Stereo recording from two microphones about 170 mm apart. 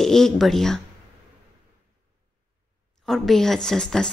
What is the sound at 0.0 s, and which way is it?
Speech, centre (ahead or behind).